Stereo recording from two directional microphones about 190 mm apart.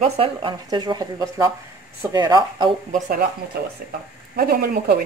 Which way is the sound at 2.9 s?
50° right (ahead or behind).